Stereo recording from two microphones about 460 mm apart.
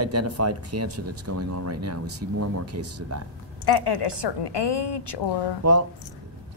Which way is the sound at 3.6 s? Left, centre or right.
Left.